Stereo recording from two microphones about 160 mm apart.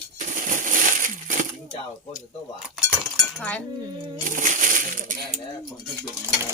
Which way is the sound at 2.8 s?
10° left (ahead or behind).